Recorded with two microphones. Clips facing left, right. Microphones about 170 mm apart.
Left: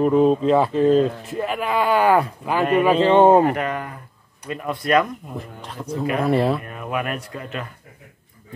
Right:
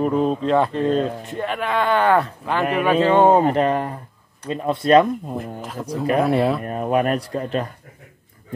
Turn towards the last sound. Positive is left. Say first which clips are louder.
# right 7 dB
turn(degrees=-35)  # may be behind; listen again after turning